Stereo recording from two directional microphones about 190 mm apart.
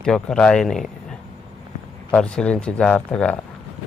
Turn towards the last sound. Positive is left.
turn(degrees=5)  # may be behind; listen again after turning